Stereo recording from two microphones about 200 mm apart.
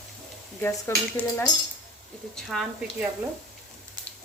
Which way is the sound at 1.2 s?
5° left (ahead or behind).